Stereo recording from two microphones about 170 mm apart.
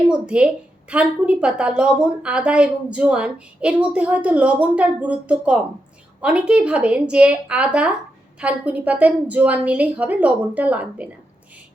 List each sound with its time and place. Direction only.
0.1 s a woman's voice: 5° right (ahead or behind)